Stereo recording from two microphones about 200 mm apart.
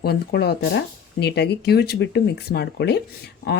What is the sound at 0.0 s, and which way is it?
Speech, 55° left (ahead or behind).